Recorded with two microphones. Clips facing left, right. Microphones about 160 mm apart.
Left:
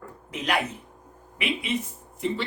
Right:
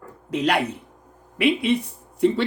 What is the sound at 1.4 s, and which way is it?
Speech, 65° right (ahead or behind).